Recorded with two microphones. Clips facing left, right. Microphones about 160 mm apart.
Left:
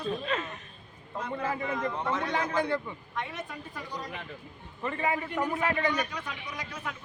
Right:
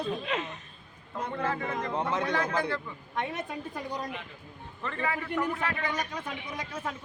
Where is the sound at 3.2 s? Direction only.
50° right (ahead or behind).